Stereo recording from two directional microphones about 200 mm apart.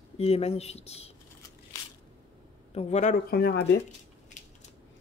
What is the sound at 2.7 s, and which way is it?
Speech, 35° left (ahead or behind).